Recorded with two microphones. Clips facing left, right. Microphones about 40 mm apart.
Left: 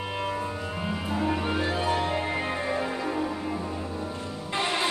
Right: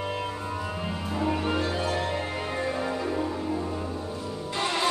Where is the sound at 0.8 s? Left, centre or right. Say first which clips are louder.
Left 2 dB; centre.